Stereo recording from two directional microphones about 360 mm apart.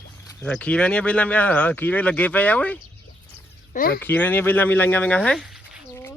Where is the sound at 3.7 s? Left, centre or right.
Left.